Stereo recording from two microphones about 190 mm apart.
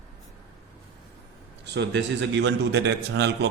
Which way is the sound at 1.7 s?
65° right (ahead or behind).